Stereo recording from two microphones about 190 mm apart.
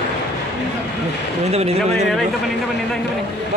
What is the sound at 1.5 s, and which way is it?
Speech, 35° right (ahead or behind).